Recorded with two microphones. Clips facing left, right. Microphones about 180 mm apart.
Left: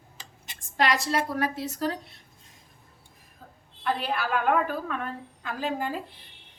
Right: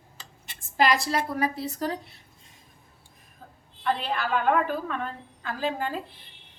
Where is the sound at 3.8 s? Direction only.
5° left (ahead or behind).